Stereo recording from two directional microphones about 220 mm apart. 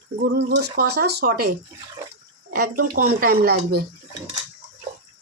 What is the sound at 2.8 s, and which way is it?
Speech, 40° right (ahead or behind).